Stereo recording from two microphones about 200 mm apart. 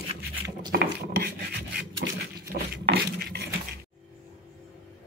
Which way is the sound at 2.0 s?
50° right (ahead or behind).